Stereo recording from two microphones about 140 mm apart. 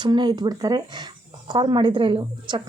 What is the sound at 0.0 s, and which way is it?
A woman's voice, 30° right (ahead or behind).